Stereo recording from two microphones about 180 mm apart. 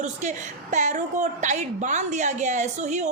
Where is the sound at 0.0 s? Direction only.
40° right (ahead or behind).